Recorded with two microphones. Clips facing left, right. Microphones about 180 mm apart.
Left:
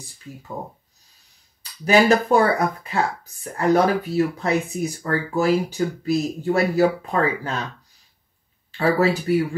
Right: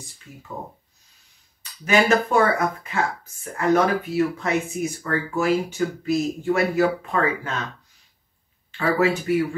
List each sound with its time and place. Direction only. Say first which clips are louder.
1.6 s speech: left 3 dB; 35° left (ahead or behind)
8.7 s speech: left 2 dB; 35° left (ahead or behind)